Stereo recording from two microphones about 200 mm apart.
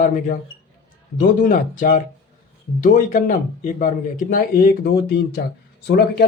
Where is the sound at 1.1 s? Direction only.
45° left (ahead or behind).